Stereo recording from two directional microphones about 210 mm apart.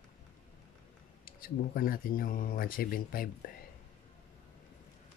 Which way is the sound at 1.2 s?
45° left (ahead or behind).